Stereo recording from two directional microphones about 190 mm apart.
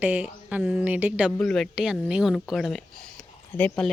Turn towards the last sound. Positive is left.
turn(degrees=5)  # may be behind; listen again after turning